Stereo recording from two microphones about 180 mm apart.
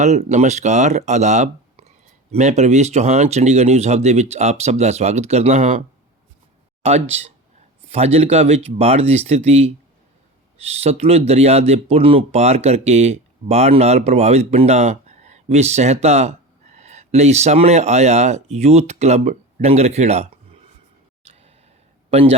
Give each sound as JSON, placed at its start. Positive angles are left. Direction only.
{"t": 0.0, "sound": "speech", "side_deg": -40}
{"t": 6.8, "sound": "speech", "side_deg": -35}
{"t": 21.2, "sound": "a sound", "side_deg": -35}
{"t": 22.1, "sound": "speech", "side_deg": -35}